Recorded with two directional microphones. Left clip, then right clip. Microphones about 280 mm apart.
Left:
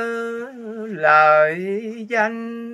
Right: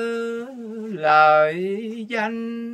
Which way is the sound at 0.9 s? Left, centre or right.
Centre.